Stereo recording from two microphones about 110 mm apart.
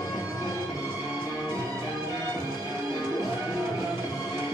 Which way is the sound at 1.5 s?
25° right (ahead or behind).